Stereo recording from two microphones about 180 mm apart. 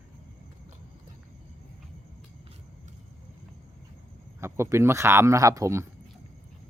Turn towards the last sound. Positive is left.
turn(degrees=-15)  # may be behind; listen again after turning